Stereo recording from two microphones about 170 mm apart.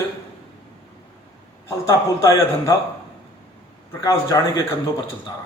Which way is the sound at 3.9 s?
20° left (ahead or behind).